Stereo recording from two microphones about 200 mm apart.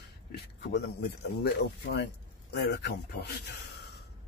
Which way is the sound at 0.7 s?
55° left (ahead or behind).